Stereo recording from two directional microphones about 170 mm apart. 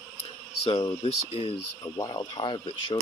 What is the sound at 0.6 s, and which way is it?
Speech, 30° left (ahead or behind).